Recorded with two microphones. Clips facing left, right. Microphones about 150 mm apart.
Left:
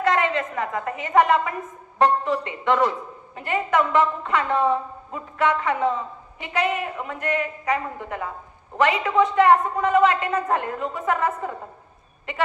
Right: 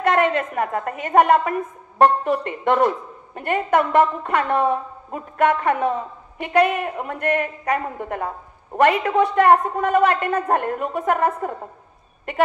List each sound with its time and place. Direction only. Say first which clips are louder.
0.0 s a woman's voice: right 3 dB; 55° right (ahead or behind)